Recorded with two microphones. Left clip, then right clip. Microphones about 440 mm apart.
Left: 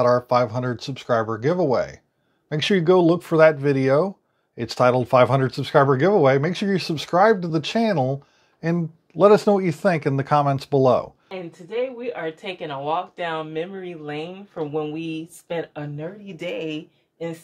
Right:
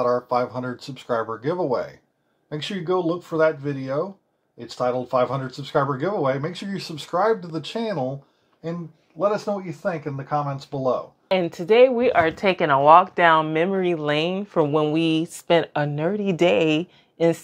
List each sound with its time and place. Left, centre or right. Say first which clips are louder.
0.0 s speech: left 3 dB; left
2.5 s speech: left 7 dB; left
9.2 s speech: left 8 dB; left
11.2 s speech: right 14 dB; right